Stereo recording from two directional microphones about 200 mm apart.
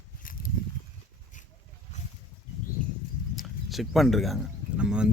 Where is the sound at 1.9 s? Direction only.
35° left (ahead or behind).